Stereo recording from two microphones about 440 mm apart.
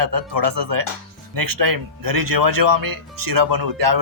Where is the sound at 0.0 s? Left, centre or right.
Right.